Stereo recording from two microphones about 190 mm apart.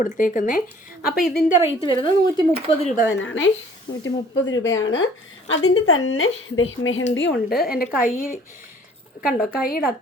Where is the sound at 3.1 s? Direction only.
90° left.